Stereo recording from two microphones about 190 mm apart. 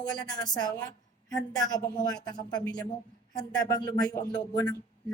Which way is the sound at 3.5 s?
20° left (ahead or behind).